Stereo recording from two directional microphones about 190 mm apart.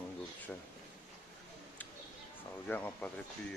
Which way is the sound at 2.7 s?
10° left (ahead or behind).